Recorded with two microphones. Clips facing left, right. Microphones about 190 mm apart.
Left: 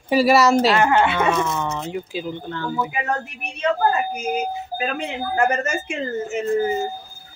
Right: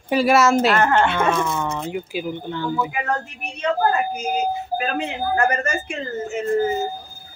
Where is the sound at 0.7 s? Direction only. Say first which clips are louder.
Even; 10° left (ahead or behind); by 2.7 s 10° right (ahead or behind).